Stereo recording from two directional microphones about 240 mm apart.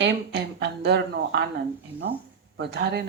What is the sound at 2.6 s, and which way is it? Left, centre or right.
Speech, right.